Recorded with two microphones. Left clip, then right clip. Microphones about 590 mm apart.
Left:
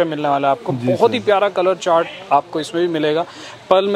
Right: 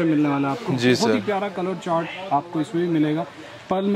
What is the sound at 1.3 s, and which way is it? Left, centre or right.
A man's voice, left.